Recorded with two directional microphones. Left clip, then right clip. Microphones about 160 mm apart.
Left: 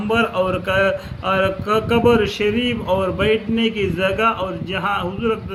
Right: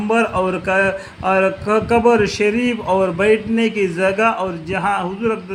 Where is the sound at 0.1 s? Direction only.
40° right (ahead or behind).